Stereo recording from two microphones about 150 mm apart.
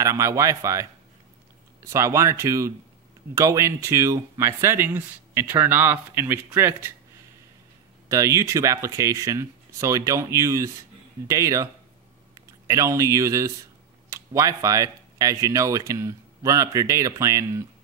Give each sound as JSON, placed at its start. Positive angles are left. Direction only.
{"t": 0.0, "sound": "speech", "side_deg": -20}
{"t": 1.9, "sound": "speech", "side_deg": -20}
{"t": 8.1, "sound": "speech", "side_deg": -20}